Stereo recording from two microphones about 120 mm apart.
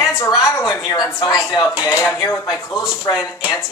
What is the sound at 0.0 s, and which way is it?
A woman's voice, 30° left (ahead or behind).